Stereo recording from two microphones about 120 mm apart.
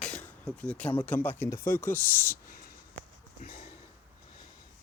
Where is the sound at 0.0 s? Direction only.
10° left (ahead or behind).